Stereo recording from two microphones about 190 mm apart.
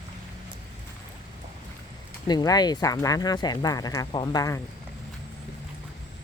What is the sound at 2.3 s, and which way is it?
Speech, 20° left (ahead or behind).